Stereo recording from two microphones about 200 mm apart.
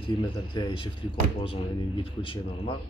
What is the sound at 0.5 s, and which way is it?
Speech, 25° left (ahead or behind).